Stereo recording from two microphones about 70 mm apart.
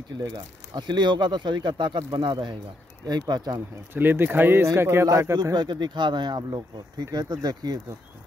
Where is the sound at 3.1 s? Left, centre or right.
Right.